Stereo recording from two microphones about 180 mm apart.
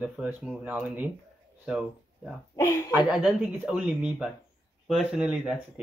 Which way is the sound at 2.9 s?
5° right (ahead or behind).